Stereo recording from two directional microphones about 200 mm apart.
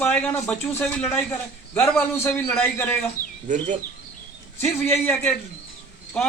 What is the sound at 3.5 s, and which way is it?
Speech, 40° right (ahead or behind).